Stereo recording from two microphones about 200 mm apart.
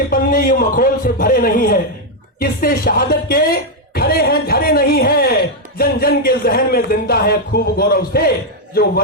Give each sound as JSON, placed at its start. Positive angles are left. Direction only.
{"t": 0.1, "sound": "speech", "side_deg": 45}